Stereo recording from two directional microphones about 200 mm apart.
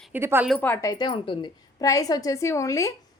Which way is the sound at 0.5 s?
10° left (ahead or behind).